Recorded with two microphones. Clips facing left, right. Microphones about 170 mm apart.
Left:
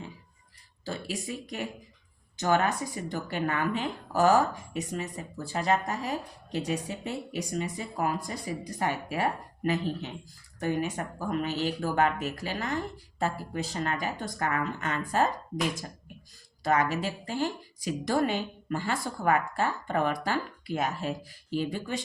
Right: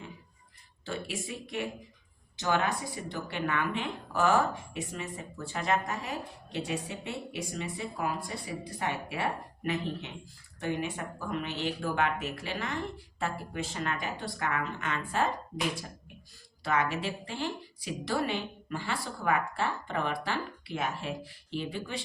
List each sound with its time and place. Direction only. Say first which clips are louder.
0.9 s speech: left 2 dB; 35° left (ahead or behind)
16.6 s a woman's voice: left 3 dB; 40° left (ahead or behind)